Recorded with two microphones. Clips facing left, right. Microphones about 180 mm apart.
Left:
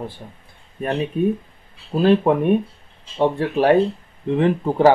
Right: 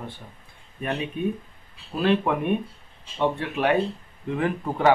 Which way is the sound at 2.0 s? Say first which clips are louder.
Left 7 dB; 35° left (ahead or behind).